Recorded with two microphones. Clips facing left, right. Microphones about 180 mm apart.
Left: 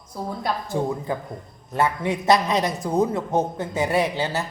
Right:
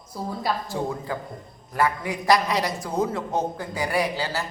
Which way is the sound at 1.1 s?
20° left (ahead or behind).